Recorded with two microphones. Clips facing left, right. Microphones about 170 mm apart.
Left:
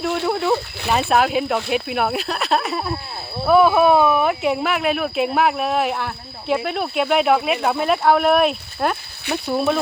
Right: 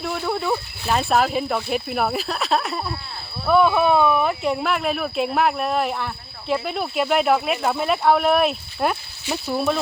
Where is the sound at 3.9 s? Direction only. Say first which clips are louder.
Left 2 dB; 5° left (ahead or behind).